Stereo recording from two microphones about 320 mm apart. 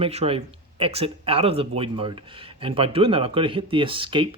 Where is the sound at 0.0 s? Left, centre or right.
Centre.